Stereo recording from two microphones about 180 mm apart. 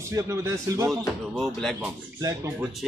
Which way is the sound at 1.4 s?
Centre (ahead or behind).